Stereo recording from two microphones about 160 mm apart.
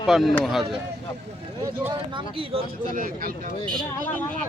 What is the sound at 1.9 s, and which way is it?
Speech, 30° right (ahead or behind).